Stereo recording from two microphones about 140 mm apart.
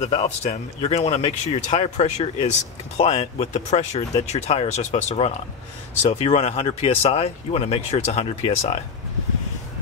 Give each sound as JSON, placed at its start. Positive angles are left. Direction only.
{"t": 0.0, "sound": "speech", "side_deg": 50}